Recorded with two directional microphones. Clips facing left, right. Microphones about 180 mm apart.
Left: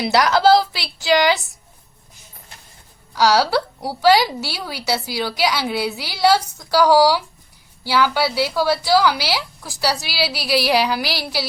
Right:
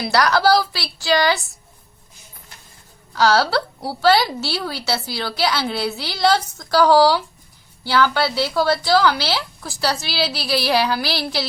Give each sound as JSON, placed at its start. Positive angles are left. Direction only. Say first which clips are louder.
{"t": 0.0, "sound": "a woman's voice", "louder": "left 2 dB", "side_deg": 20}
{"t": 3.2, "sound": "a woman's voice", "louder": "left 1 dB", "side_deg": 10}